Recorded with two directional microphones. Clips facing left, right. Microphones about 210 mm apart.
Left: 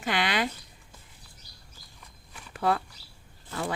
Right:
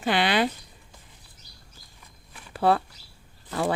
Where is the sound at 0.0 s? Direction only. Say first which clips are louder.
Right 5 dB; 30° right (ahead or behind).